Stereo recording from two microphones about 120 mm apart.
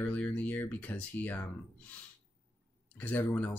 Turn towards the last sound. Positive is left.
turn(degrees=15)  # may be behind; listen again after turning